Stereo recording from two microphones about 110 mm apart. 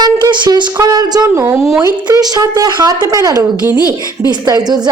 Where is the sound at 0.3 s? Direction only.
40° right (ahead or behind).